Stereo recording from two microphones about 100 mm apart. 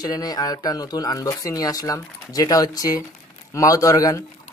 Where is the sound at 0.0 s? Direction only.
40° left (ahead or behind).